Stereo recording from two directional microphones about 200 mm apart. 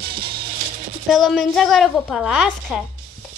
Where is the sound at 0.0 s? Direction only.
50° right (ahead or behind).